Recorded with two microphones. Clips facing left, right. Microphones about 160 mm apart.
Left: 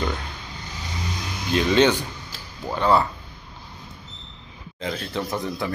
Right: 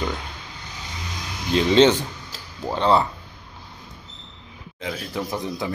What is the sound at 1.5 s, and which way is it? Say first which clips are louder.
Speech: right 3 dB; 20° right (ahead or behind).